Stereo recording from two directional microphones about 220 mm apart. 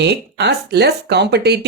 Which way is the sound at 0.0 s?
50° right (ahead or behind).